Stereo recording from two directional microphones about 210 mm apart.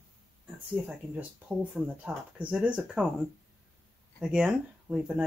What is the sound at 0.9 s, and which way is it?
Speech, 5° right (ahead or behind).